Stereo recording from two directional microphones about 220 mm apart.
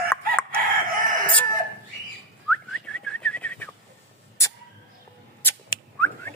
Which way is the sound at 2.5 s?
5° left (ahead or behind).